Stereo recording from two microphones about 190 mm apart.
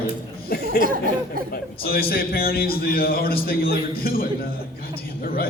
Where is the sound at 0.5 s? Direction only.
55° left (ahead or behind).